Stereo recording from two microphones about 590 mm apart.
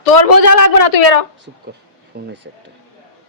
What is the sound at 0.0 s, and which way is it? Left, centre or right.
Speech, left.